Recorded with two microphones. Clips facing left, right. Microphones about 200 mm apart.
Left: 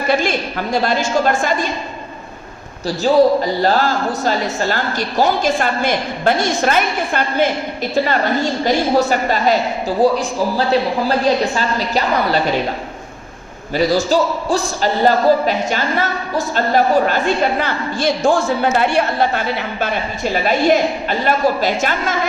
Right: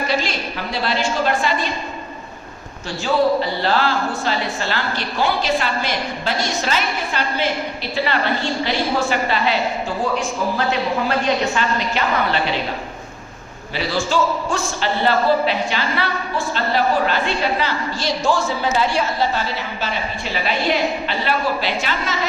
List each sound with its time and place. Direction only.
0.1 s speech: 50° left (ahead or behind)
2.8 s a man's voice: 40° left (ahead or behind)
13.7 s speech: 40° left (ahead or behind)